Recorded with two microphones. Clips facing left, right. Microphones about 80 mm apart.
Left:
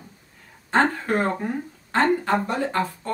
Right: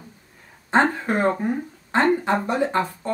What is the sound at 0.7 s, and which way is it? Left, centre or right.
Speech, right.